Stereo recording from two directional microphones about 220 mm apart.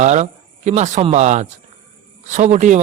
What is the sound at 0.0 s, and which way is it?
Speech, 30° right (ahead or behind).